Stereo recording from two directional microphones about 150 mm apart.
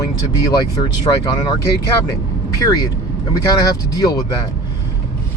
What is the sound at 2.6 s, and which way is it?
Speech, 25° left (ahead or behind).